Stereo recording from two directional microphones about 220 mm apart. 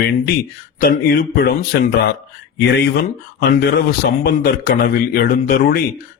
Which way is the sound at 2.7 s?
45° left (ahead or behind).